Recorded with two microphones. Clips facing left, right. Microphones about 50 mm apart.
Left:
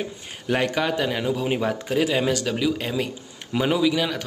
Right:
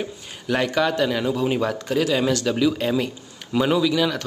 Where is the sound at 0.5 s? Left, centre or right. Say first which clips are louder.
Right 2 dB; centre.